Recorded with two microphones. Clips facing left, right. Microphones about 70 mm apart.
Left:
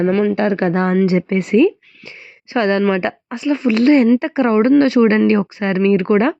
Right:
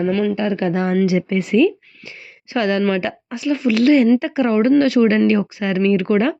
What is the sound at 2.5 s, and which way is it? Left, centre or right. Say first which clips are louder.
Speech: left 3 dB; left.